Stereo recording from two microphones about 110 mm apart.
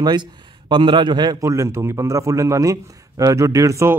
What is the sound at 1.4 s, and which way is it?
Speech, 25° right (ahead or behind).